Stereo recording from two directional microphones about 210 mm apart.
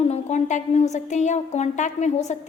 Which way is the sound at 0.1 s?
35° left (ahead or behind).